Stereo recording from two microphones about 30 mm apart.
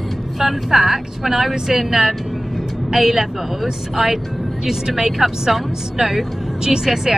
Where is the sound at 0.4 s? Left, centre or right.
Centre.